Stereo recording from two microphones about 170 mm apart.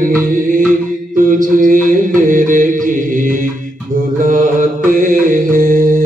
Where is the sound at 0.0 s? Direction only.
55° right (ahead or behind).